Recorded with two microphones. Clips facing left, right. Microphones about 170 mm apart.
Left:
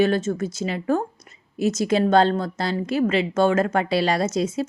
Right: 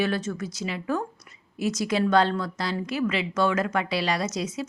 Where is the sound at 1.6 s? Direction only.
25° left (ahead or behind).